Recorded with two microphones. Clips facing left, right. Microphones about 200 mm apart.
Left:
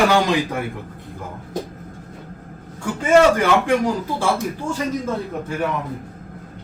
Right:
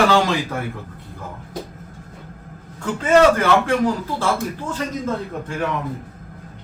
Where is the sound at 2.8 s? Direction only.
10° left (ahead or behind).